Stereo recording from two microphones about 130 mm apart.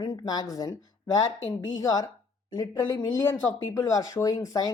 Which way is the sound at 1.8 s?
30° left (ahead or behind).